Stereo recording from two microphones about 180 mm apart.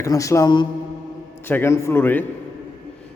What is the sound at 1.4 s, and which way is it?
Speech, 10° left (ahead or behind).